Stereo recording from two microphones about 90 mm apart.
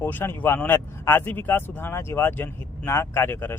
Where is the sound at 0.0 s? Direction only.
25° left (ahead or behind).